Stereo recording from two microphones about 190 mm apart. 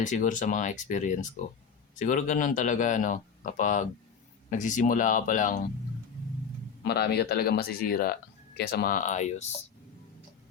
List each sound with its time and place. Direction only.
0.0 s speech: 40° left (ahead or behind)
6.8 s speech: 60° left (ahead or behind); by 9.5 s 40° left (ahead or behind)